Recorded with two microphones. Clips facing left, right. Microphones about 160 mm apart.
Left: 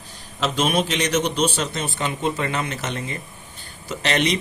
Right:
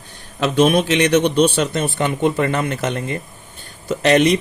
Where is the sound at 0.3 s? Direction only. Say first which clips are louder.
Right 6 dB; 55° right (ahead or behind).